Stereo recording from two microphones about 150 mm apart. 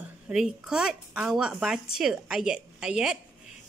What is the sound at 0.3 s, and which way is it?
A woman's voice, 5° right (ahead or behind).